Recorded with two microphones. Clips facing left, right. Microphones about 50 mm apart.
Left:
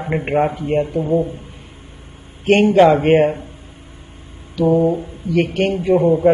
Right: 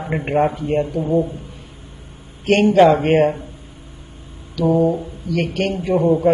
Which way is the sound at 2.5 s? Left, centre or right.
Centre.